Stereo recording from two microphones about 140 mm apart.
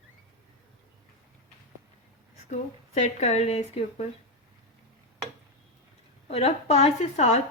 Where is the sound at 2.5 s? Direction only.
60° left (ahead or behind).